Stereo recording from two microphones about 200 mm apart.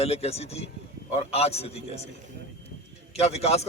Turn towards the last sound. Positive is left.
turn(degrees=30)  # may be behind; listen again after turning